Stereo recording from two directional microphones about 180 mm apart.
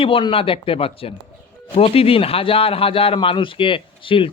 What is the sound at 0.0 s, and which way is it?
A man's voice, 30° left (ahead or behind).